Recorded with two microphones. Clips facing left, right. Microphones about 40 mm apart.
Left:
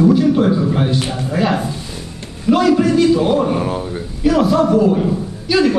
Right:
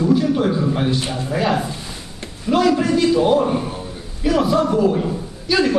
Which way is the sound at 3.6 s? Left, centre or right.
Left.